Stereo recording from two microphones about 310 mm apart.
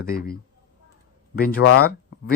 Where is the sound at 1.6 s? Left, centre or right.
Left.